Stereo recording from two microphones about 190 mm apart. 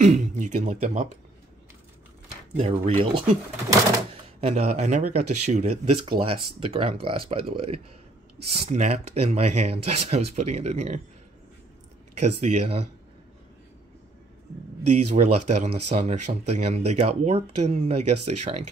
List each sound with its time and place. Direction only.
0.0 s speech: 40° right (ahead or behind)
2.5 s speech: 35° right (ahead or behind)
12.2 s speech: 35° right (ahead or behind)
15.1 s speech: 35° right (ahead or behind)